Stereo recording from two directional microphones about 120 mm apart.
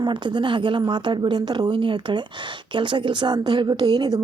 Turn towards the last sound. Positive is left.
turn(degrees=-35)  # may be behind; listen again after turning